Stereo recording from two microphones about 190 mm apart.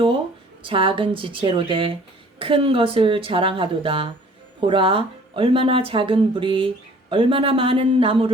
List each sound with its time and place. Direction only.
0.6 s speech: 25° right (ahead or behind)